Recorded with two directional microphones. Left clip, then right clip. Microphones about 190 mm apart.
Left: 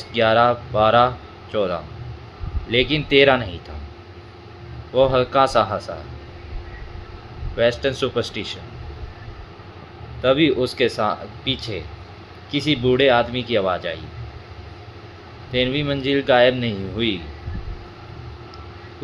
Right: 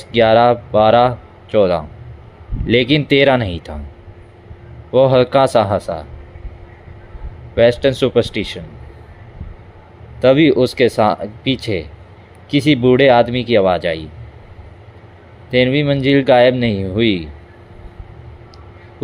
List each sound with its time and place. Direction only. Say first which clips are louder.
0.1 s speech: right 6 dB; 45° right (ahead or behind)
4.9 s speech: right 6 dB; 45° right (ahead or behind)
7.5 s speech: right 7 dB; 40° right (ahead or behind)
10.2 s speech: right 6 dB; 45° right (ahead or behind)
15.5 s speech: right 7 dB; 45° right (ahead or behind)